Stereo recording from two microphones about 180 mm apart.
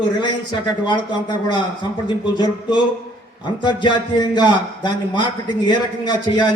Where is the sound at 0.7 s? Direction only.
25° left (ahead or behind).